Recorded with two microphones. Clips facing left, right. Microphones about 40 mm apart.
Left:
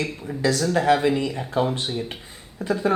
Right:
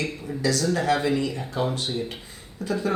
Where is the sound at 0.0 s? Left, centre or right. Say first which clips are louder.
Left 2 dB; left.